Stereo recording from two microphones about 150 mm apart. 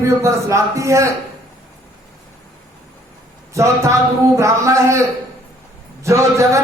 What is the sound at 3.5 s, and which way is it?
Speech, 20° right (ahead or behind).